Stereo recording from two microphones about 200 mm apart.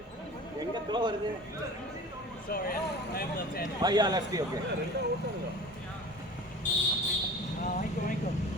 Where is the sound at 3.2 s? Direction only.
50° left (ahead or behind).